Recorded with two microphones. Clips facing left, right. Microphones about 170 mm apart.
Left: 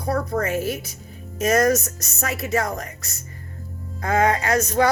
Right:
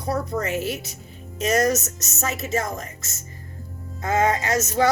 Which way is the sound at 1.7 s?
25° right (ahead or behind).